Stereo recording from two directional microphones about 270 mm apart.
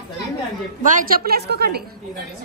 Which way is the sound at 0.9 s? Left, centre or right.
Right.